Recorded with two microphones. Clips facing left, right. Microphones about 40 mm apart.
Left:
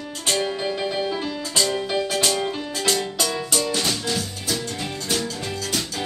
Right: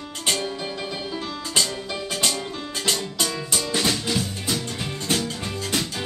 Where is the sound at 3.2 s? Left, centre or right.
Right.